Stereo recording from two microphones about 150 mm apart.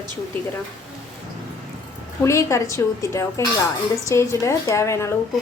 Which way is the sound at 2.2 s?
20° left (ahead or behind).